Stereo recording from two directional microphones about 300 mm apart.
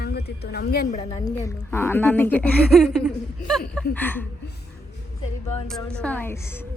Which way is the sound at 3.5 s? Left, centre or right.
Centre.